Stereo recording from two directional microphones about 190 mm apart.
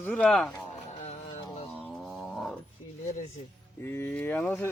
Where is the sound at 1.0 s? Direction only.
35° left (ahead or behind).